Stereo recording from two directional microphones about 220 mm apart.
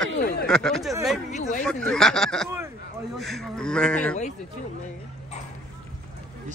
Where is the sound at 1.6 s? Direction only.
5° left (ahead or behind).